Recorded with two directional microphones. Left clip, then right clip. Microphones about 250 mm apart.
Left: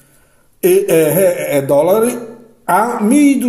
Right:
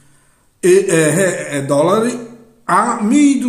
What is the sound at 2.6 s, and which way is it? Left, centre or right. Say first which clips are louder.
Speech: left 1 dB; centre.